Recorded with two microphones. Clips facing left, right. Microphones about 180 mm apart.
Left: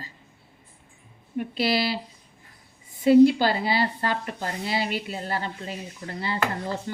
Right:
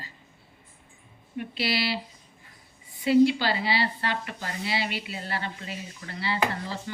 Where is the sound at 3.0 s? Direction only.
45° left (ahead or behind).